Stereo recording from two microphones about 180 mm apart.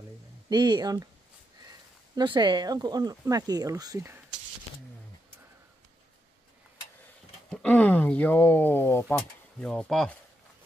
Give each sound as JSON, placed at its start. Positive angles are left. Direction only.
{"t": 0.5, "sound": "speech", "side_deg": -25}
{"t": 2.1, "sound": "speech", "side_deg": -25}
{"t": 7.5, "sound": "speech", "side_deg": 10}